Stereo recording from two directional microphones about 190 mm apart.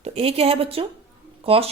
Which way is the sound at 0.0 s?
30° right (ahead or behind).